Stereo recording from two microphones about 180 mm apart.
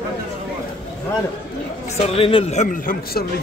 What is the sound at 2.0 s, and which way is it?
A man's voice, 30° left (ahead or behind).